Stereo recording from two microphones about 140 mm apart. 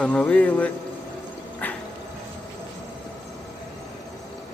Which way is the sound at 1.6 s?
10° left (ahead or behind).